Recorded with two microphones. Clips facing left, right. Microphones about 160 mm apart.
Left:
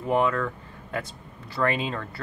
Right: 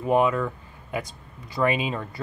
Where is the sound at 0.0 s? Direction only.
15° right (ahead or behind).